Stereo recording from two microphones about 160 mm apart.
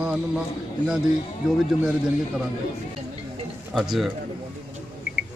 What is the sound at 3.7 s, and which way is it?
Speech, centre (ahead or behind).